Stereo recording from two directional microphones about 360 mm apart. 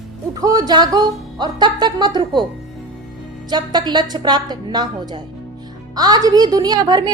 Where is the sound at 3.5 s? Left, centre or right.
Centre.